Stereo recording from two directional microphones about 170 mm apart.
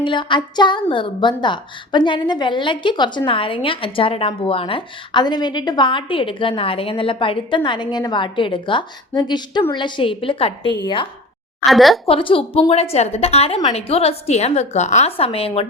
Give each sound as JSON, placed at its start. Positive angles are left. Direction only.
{"t": 0.0, "sound": "a woman's voice", "side_deg": 30}
{"t": 11.6, "sound": "a woman's voice", "side_deg": 0}
{"t": 12.0, "sound": "a woman's voice", "side_deg": 30}